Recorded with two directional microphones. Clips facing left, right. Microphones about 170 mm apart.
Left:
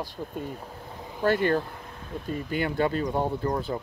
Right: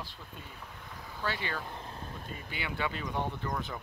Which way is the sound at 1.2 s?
50° left (ahead or behind).